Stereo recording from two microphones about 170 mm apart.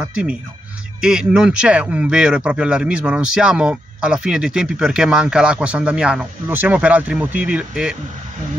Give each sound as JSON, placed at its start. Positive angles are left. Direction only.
{"t": 0.0, "sound": "speech", "side_deg": -5}